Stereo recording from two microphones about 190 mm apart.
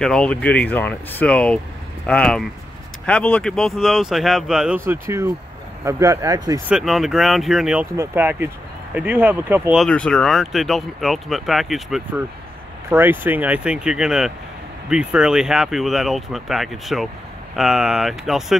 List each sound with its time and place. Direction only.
0.0 s speech: 5° left (ahead or behind); by 6.6 s 20° right (ahead or behind)
6.7 s speech: centre (ahead or behind)
9.8 s speech: 5° left (ahead or behind)